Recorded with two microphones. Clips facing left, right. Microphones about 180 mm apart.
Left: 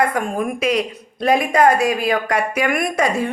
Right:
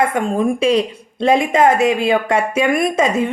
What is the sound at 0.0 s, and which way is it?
A woman's voice, 25° right (ahead or behind).